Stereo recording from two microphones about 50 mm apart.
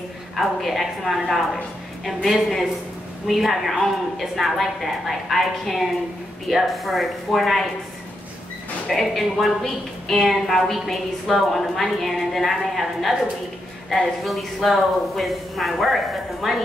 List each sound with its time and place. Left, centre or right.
0.4 s a woman's voice: centre
8.8 s a woman's voice: centre